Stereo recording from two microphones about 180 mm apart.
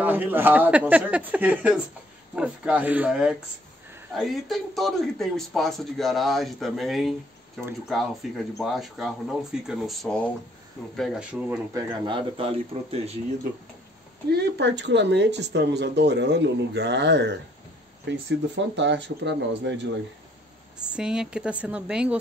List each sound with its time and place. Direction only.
0.0 s a man's voice: 10° right (ahead or behind)
11.0 s a man's voice: 5° right (ahead or behind)
11.7 s speech: 25° right (ahead or behind)
14.3 s speech: 70° right (ahead or behind)
20.8 s a man's voice: 5° right (ahead or behind)